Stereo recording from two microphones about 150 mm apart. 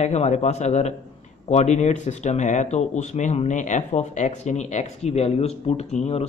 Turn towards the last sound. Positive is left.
turn(degrees=45)  # may be behind; listen again after turning